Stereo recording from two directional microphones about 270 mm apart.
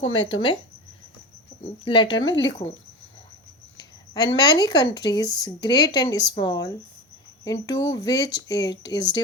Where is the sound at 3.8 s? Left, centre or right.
Centre.